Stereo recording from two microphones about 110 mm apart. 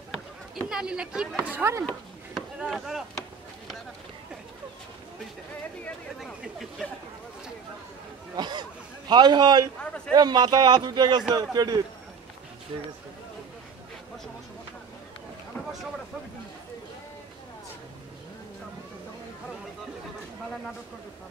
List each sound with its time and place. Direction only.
0.6 s speech: 5° right (ahead or behind); by 1.9 s 20° right (ahead or behind)
2.3 s chop: 5° right (ahead or behind)
6.1 s speech: centre (ahead or behind)
8.4 s a man's voice: 40° right (ahead or behind)
9.8 s a man's voice: 10° left (ahead or behind)
10.1 s speech: 40° right (ahead or behind)
12.7 s a man's voice: 50° right (ahead or behind)